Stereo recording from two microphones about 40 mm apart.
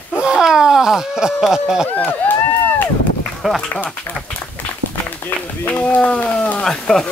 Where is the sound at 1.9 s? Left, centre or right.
Left.